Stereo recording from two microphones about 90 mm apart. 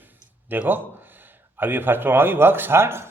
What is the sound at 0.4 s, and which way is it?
A man's voice, 20° right (ahead or behind).